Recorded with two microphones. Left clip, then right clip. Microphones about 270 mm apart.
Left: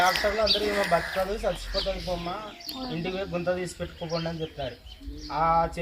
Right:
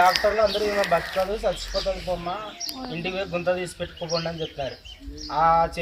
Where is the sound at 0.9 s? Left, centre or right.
Centre.